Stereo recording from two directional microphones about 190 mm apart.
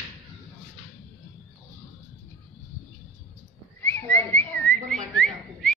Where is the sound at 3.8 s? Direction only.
10° left (ahead or behind).